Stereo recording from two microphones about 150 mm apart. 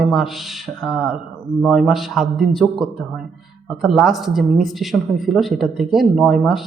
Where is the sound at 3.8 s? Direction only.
Centre (ahead or behind).